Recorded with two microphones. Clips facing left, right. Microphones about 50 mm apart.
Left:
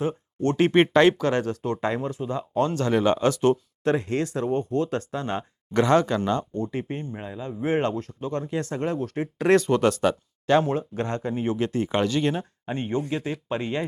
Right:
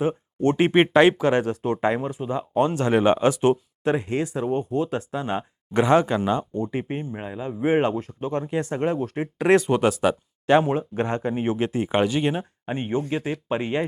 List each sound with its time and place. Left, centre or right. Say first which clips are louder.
0.0 s speech: right 3 dB; centre